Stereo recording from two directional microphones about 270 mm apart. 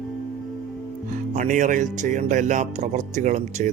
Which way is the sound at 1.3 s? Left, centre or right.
Right.